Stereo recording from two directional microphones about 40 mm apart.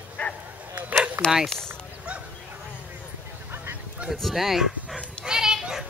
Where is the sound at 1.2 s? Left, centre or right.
Right.